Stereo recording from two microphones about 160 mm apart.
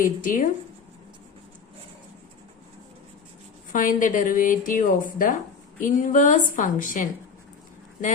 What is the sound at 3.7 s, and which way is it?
A woman's voice, 60° left (ahead or behind).